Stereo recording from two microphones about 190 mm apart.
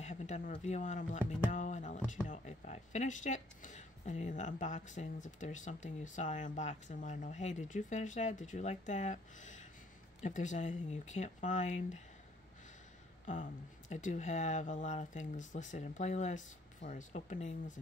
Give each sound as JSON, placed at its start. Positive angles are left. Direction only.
{"t": 0.0, "sound": "speech", "side_deg": 40}
{"t": 13.2, "sound": "speech", "side_deg": 40}